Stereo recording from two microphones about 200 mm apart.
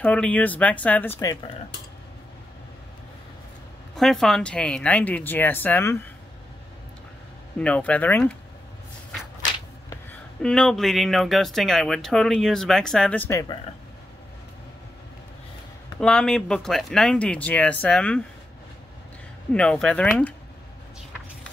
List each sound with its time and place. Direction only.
0.0 s speech: 5° left (ahead or behind)
3.9 s speech: centre (ahead or behind)
7.5 s speech: 5° left (ahead or behind)
10.4 s speech: 5° left (ahead or behind)
16.0 s speech: 5° left (ahead or behind)
19.5 s speech: 5° left (ahead or behind)